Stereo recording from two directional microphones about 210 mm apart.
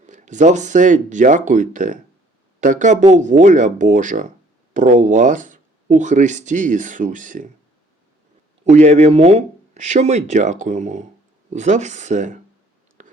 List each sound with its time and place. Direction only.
0.0 s speech: 35° right (ahead or behind)
8.6 s speech: 35° right (ahead or behind)
13.0 s whispering: 35° right (ahead or behind)